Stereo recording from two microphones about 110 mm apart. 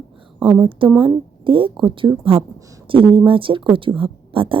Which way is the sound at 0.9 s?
50° right (ahead or behind).